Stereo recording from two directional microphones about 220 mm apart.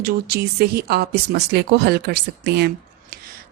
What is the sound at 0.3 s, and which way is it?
Speech, 45° right (ahead or behind).